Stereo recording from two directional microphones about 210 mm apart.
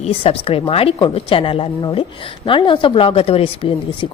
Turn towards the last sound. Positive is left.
turn(degrees=25)  # may be behind; listen again after turning